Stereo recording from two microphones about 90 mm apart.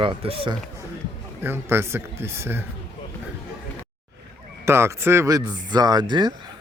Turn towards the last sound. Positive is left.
turn(degrees=-50)  # may be behind; listen again after turning